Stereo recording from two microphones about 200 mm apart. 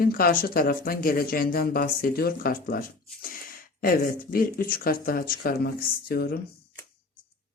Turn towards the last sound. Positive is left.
turn(degrees=50)  # may be behind; listen again after turning